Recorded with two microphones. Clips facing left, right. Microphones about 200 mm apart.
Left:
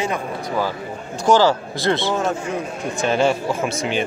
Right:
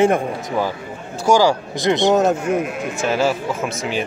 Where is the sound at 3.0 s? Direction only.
5° right (ahead or behind).